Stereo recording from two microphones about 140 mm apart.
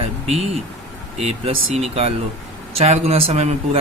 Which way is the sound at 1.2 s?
50° right (ahead or behind).